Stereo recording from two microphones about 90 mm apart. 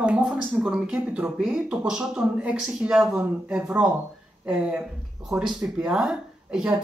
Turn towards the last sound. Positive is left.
turn(degrees=-5)  # may be behind; listen again after turning